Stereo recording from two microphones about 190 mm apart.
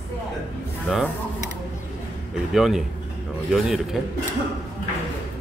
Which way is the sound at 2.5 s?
Centre (ahead or behind).